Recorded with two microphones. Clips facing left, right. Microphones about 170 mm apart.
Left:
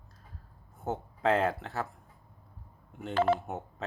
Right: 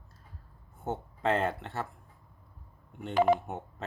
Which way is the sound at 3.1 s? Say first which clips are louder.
Right 2 dB; 15° right (ahead or behind).